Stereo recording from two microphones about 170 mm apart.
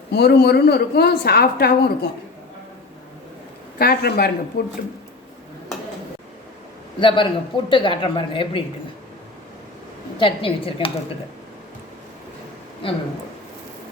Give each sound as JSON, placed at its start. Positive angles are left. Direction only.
{"t": 0.1, "sound": "a woman's voice", "side_deg": 75}
{"t": 3.8, "sound": "speech", "side_deg": 65}
{"t": 7.0, "sound": "speech", "side_deg": 30}
{"t": 10.2, "sound": "a woman's voice", "side_deg": 30}
{"t": 12.8, "sound": "a woman's voice", "side_deg": 30}